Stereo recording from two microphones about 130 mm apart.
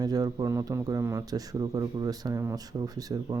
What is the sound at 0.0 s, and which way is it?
Speech, 30° right (ahead or behind).